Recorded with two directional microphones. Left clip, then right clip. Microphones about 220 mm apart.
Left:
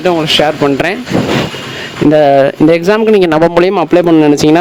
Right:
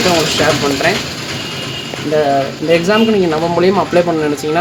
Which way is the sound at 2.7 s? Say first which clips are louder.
Left 4 dB; 45° left (ahead or behind).